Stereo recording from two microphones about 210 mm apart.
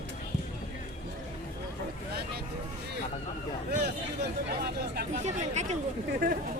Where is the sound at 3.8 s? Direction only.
50° right (ahead or behind).